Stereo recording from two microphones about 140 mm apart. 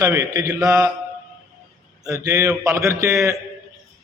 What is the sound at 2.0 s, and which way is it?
A man's voice, 25° right (ahead or behind).